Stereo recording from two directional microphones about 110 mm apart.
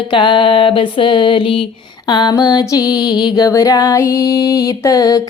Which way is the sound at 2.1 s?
40° left (ahead or behind).